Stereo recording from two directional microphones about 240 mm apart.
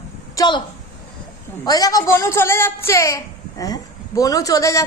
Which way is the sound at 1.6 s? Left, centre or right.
Centre.